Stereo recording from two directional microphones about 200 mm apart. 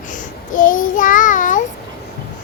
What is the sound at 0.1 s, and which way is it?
Child singing, 40° left (ahead or behind).